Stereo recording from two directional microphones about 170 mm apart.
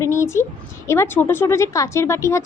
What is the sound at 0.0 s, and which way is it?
A woman's voice, 15° left (ahead or behind).